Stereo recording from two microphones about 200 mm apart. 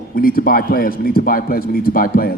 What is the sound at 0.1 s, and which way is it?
A man's voice, 45° left (ahead or behind).